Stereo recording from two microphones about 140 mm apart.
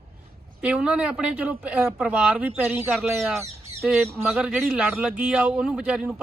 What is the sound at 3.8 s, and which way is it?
Speech, centre (ahead or behind).